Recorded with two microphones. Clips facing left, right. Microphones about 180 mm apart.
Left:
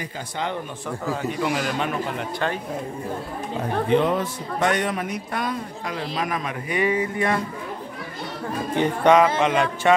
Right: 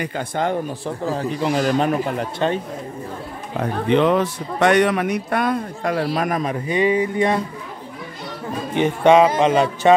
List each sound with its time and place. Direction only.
0.8 s a man's voice: 30° right (ahead or behind)
3.9 s speech: 80° right; by 6.0 s 55° right (ahead or behind)
6.1 s speech: 45° right (ahead or behind)
6.7 s speech: 25° right (ahead or behind)
8.7 s speech: 25° right (ahead or behind)